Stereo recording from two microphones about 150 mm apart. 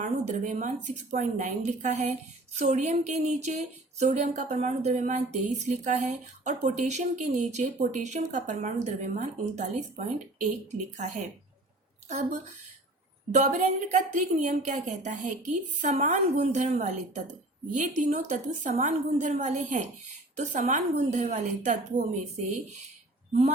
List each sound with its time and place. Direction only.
0.0 s speech: 55° right (ahead or behind)